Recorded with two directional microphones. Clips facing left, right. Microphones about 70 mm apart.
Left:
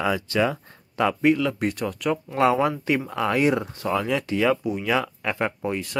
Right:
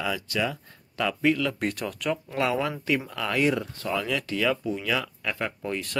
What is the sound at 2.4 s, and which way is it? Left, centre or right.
Speech, left.